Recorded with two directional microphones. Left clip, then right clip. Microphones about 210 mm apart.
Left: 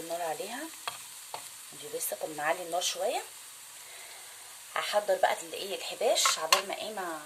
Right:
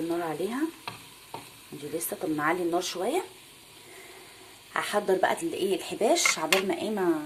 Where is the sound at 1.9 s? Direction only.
Centre (ahead or behind).